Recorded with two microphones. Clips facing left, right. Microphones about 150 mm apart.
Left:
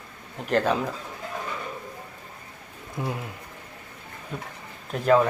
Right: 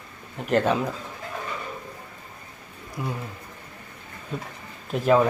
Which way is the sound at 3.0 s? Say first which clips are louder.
Left 1 dB; 25° left (ahead or behind).